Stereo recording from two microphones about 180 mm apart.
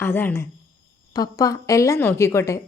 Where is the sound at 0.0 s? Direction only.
10° left (ahead or behind).